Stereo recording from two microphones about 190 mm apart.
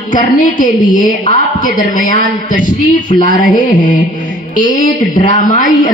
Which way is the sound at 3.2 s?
40° left (ahead or behind).